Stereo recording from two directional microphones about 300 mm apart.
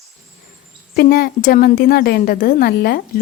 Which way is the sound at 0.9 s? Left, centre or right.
Left.